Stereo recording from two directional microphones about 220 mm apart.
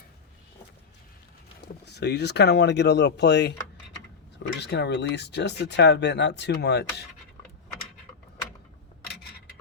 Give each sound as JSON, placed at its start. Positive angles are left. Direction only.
{"t": 1.6, "sound": "speech", "side_deg": 50}
{"t": 4.6, "sound": "speech", "side_deg": 50}